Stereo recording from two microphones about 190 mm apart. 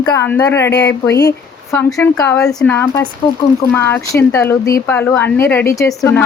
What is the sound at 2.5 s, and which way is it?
Speech, 5° left (ahead or behind).